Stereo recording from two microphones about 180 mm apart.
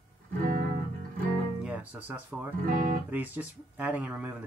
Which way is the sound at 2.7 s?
45° right (ahead or behind).